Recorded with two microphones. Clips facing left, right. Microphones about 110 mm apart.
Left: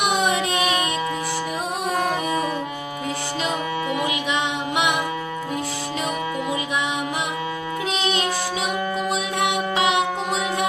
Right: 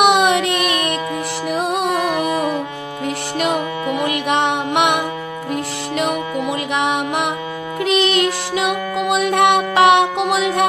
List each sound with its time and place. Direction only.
0.0 s music: 75° right (ahead or behind)
1.5 s music: 75° right (ahead or behind)
3.3 s music: 65° right (ahead or behind)
6.7 s music: 65° right (ahead or behind)